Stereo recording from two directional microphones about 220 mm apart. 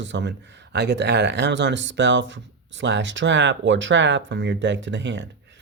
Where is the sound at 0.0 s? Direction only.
55° right (ahead or behind).